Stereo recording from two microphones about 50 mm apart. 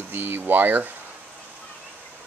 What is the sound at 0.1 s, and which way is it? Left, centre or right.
Speech, right.